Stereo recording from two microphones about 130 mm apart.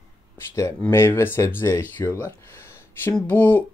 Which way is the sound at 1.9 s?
20° left (ahead or behind).